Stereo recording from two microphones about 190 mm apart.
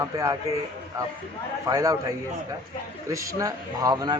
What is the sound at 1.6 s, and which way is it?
Speech, 15° right (ahead or behind).